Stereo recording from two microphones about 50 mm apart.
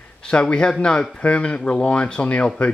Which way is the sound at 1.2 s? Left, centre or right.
Left.